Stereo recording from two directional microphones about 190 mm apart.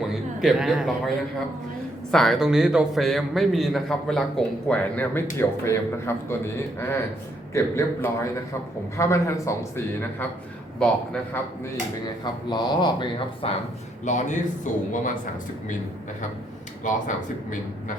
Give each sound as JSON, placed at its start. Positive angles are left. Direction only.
{"t": 0.1, "sound": "a man's voice", "side_deg": 0}
{"t": 12.2, "sound": "speech", "side_deg": 25}
{"t": 14.0, "sound": "speech", "side_deg": 40}
{"t": 16.9, "sound": "speech", "side_deg": 45}